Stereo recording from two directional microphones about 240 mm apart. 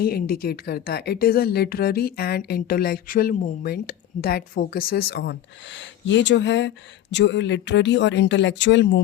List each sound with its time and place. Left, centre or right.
0.0 s a woman's voice: left